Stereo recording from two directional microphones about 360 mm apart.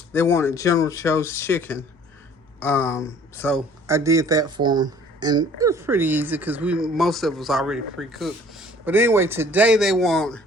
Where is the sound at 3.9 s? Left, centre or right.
Centre.